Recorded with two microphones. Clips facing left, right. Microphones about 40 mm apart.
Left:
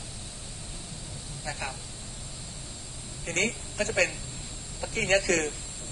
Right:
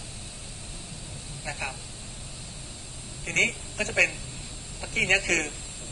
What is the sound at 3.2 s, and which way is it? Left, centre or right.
A woman's voice, right.